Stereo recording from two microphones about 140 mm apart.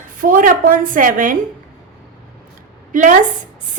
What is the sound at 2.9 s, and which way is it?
Speech, 70° right (ahead or behind).